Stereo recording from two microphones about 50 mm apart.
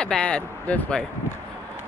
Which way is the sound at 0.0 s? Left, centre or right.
Centre.